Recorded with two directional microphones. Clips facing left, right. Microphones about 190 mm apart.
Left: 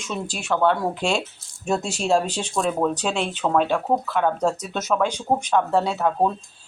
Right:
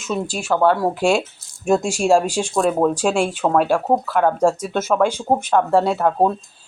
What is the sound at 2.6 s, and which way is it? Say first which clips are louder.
Speech: right 5 dB; 45° right (ahead or behind).